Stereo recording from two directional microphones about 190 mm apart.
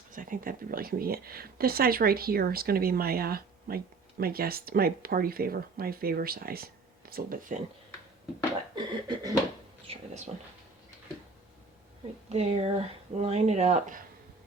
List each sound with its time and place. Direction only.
0.1 s speech: 45° right (ahead or behind)
8.7 s a sound: 20° right (ahead or behind)
9.8 s speech: 30° right (ahead or behind)
12.3 s speech: 35° right (ahead or behind)